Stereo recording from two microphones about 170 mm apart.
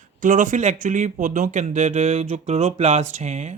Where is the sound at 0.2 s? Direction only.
50° right (ahead or behind).